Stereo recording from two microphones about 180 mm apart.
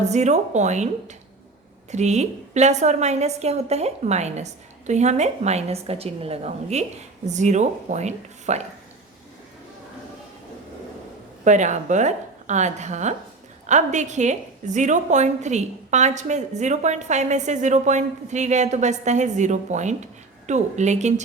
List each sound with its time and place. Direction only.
0.0 s a woman's voice: 40° right (ahead or behind)
11.4 s a woman's voice: 40° right (ahead or behind)